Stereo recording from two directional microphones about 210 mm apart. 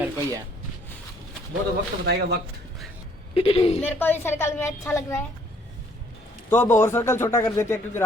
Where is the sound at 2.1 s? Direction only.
50° right (ahead or behind).